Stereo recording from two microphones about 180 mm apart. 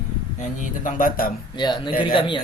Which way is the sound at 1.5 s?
25° left (ahead or behind).